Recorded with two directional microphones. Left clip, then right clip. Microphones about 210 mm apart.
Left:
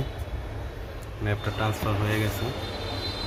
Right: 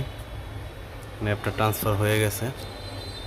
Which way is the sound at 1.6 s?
45° right (ahead or behind).